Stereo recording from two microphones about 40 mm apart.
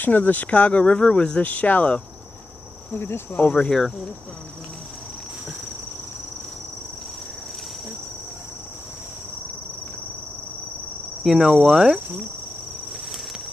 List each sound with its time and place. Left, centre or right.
0.0 s speech: left
1.4 s speech: left
2.9 s cricket: left
3.3 s speech: left
11.2 s cricket: centre